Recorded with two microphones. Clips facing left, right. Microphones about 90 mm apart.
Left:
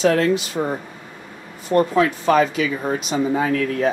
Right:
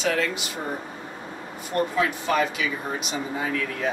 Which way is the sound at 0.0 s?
40° left (ahead or behind).